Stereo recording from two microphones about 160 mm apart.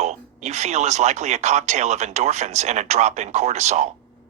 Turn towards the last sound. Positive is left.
turn(degrees=-45)  # may be behind; listen again after turning